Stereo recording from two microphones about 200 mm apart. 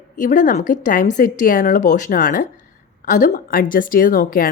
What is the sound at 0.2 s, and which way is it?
A woman's voice, 40° left (ahead or behind).